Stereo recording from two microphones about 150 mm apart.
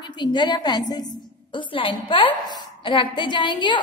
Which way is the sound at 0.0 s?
30° left (ahead or behind).